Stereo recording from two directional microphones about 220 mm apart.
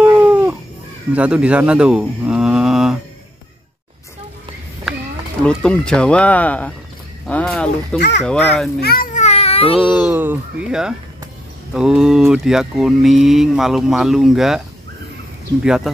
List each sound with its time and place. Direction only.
0.0 s a sound: 5° right (ahead or behind)
1.1 s speech: 5° right (ahead or behind)
5.4 s speech: 5° left (ahead or behind)
8.8 s a sound: 40° left (ahead or behind)
9.8 s speech: 5° right (ahead or behind)
15.6 s speech: 5° right (ahead or behind)